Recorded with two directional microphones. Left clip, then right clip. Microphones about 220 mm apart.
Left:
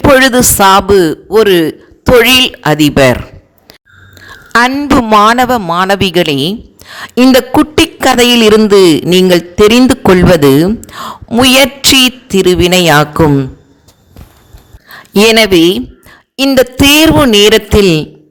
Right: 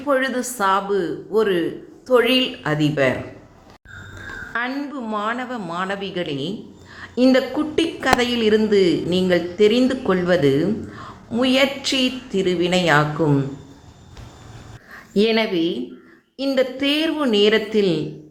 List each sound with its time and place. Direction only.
0.2 s speech: 45° left (ahead or behind)
4.7 s speech: 40° left (ahead or behind)
15.2 s speech: 45° left (ahead or behind)